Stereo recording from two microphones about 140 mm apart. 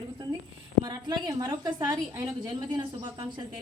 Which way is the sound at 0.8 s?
30° right (ahead or behind).